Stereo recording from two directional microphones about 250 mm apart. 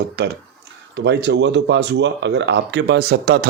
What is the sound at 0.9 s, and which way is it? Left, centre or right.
Speech, right.